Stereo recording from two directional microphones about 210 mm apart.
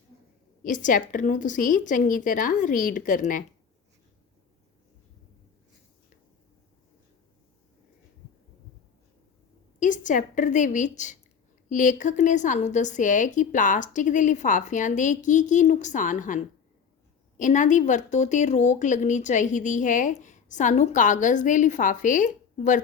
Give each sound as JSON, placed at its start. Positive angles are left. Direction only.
{"t": 0.6, "sound": "a woman's voice", "side_deg": 40}
{"t": 9.8, "sound": "a woman's voice", "side_deg": 35}